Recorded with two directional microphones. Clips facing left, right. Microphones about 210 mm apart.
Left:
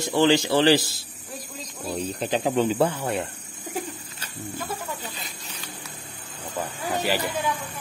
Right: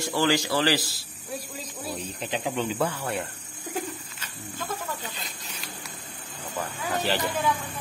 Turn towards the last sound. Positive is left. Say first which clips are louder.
# left 2 dB
turn(degrees=10)  # may be behind; listen again after turning